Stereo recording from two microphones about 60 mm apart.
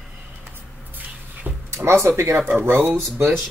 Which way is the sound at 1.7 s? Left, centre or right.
Right.